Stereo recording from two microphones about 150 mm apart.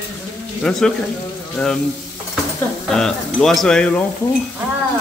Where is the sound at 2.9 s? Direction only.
5° left (ahead or behind).